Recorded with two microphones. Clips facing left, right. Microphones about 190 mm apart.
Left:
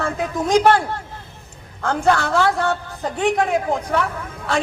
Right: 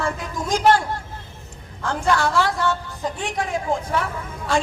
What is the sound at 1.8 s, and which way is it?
Speech, 55° left (ahead or behind).